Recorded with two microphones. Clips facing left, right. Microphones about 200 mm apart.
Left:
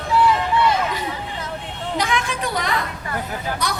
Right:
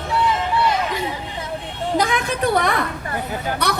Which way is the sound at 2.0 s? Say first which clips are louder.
Right 3 dB; 50° right (ahead or behind).